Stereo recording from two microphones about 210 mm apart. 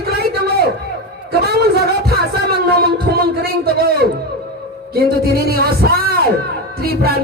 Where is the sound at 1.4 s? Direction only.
50° right (ahead or behind).